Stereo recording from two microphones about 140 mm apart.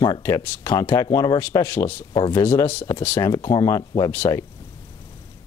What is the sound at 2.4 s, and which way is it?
Speech, 15° left (ahead or behind).